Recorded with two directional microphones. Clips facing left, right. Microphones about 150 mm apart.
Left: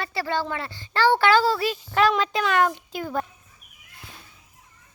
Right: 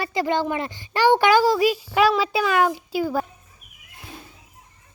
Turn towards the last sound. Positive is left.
turn(degrees=-5)  # may be behind; listen again after turning